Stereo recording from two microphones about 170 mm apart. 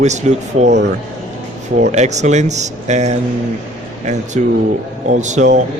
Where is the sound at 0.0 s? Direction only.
45° right (ahead or behind).